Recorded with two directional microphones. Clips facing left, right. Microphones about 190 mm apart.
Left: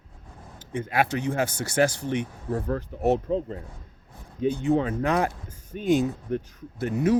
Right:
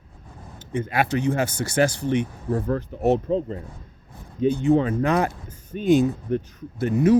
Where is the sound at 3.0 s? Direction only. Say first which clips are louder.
Right 2 dB; 90° right.